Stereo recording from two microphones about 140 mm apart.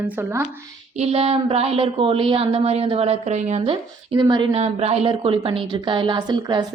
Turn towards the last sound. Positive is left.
turn(degrees=-30)  # may be behind; listen again after turning